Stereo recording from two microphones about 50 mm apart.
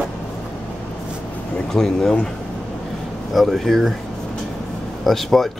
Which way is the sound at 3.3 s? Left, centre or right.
Centre.